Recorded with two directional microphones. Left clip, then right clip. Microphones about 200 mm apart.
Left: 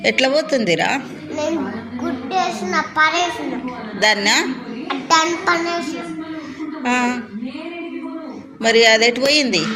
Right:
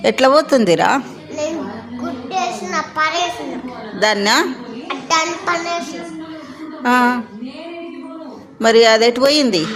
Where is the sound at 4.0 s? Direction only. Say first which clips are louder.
Right 1 dB; 30° right (ahead or behind).